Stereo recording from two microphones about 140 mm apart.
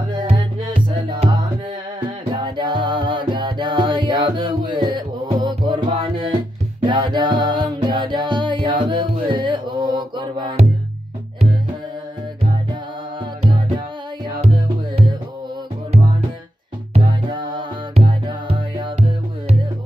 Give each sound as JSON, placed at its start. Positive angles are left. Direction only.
{"t": 0.2, "sound": "music", "side_deg": -35}
{"t": 16.9, "sound": "music", "side_deg": -35}